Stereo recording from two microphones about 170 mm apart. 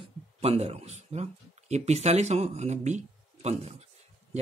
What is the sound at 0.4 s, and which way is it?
Speech, 35° right (ahead or behind).